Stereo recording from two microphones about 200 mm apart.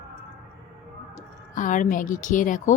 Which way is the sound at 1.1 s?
40° left (ahead or behind).